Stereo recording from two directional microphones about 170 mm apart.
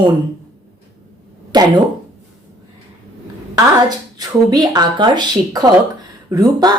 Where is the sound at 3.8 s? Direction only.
25° right (ahead or behind).